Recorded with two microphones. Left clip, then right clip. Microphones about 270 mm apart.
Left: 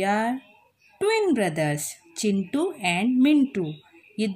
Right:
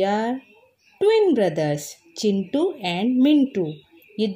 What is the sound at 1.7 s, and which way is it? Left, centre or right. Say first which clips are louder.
Speech: right 2 dB; left.